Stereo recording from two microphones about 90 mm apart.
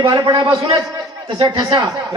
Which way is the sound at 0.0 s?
50° right (ahead or behind).